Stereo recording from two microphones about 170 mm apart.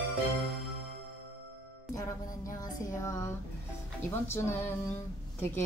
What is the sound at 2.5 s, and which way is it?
Female singing, 20° left (ahead or behind).